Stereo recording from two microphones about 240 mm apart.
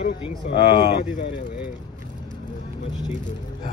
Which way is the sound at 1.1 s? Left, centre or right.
Left.